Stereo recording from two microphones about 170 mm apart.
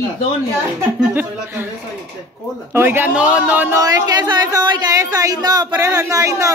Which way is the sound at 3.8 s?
25° right (ahead or behind).